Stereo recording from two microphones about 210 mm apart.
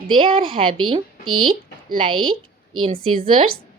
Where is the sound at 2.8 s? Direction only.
25° right (ahead or behind).